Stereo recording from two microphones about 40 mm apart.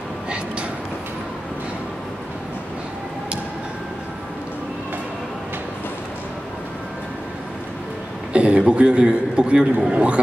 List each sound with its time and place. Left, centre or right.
8.3 s a man's voice: right
9.8 s a man's voice: right